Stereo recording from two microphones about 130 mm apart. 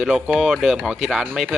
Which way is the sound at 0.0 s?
5° right (ahead or behind).